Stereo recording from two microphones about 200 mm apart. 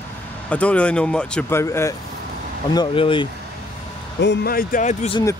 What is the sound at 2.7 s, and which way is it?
Speech, 25° left (ahead or behind).